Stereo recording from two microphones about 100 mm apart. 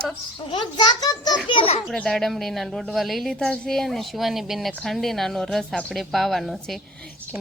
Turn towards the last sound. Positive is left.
turn(degrees=0)  # may be behind; listen again after turning